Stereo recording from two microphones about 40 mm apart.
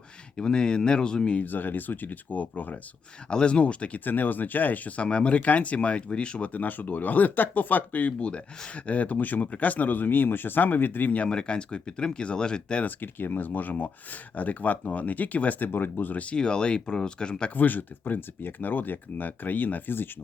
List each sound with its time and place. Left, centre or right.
0.3 s speech: left
1.4 s speech: left
3.2 s speech: left
4.0 s speech: left
5.0 s speech: left
6.5 s speech: left
8.2 s speech: left
11.3 s speech: left
12.8 s speech: left
16.4 s speech: left
17.5 s speech: left